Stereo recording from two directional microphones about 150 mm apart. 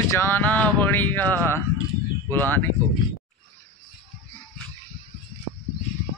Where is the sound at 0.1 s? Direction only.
15° left (ahead or behind).